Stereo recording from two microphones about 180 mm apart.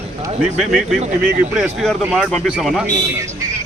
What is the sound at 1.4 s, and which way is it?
Speech, 5° right (ahead or behind).